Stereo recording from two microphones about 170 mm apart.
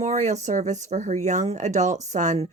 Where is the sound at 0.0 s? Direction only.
40° right (ahead or behind).